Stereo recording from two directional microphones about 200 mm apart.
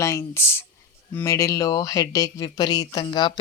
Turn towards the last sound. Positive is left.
turn(degrees=25)  # may be behind; listen again after turning